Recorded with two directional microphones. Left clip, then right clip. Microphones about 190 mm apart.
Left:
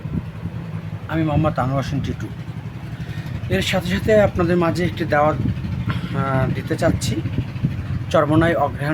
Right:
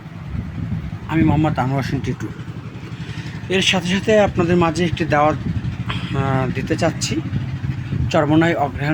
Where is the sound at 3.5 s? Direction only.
10° right (ahead or behind).